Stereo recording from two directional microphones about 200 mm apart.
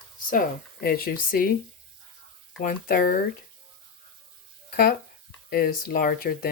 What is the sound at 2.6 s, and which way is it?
Speech, 45° left (ahead or behind).